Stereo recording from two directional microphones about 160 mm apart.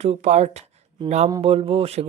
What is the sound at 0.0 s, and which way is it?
Speech, 45° right (ahead or behind).